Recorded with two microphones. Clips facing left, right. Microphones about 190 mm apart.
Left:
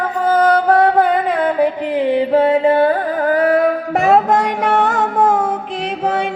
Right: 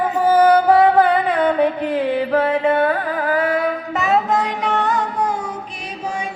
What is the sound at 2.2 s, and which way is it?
Music, 25° left (ahead or behind).